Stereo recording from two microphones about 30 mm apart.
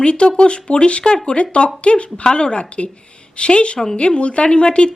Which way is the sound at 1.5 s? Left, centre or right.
Left.